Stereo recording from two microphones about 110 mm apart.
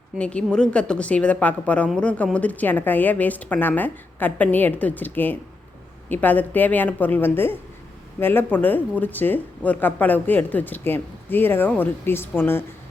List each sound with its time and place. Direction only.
0.2 s speech: 10° left (ahead or behind)